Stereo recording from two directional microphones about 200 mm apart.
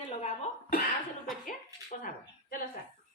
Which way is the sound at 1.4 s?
45° left (ahead or behind).